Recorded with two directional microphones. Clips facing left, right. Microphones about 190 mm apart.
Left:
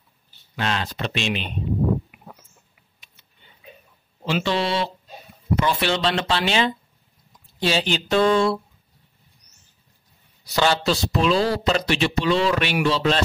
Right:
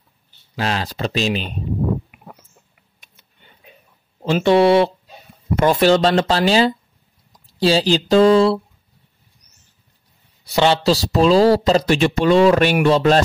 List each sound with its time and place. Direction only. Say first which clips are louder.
0.6 s speech: right 4 dB; 35° right (ahead or behind)
4.2 s speech: right 9 dB; 50° right (ahead or behind)
5.6 s speech: right 9 dB; 45° right (ahead or behind)
10.5 s a man's voice: right 5 dB; 25° right (ahead or behind); by 13.2 s 50° right (ahead or behind)